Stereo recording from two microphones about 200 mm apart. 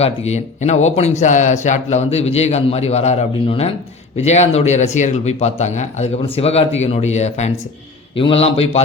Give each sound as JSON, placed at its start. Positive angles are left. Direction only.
{"t": 0.0, "sound": "a man's voice", "side_deg": 35}